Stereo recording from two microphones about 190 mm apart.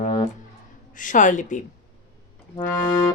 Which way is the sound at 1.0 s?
40° left (ahead or behind).